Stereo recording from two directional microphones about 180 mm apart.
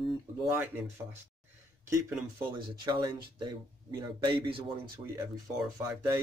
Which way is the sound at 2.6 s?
25° right (ahead or behind).